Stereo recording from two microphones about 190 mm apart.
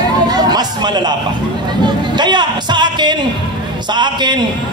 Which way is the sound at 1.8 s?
25° right (ahead or behind).